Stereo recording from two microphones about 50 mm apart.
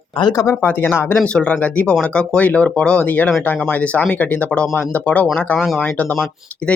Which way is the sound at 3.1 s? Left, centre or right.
Left.